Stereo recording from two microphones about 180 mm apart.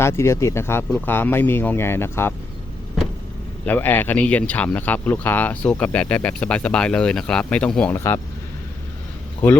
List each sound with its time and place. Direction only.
0.0 s speech: 15° left (ahead or behind)
3.7 s speech: 10° left (ahead or behind)